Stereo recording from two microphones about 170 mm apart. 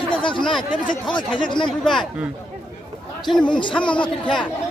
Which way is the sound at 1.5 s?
30° left (ahead or behind).